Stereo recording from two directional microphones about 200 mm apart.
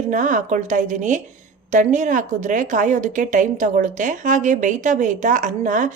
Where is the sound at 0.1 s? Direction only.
40° right (ahead or behind).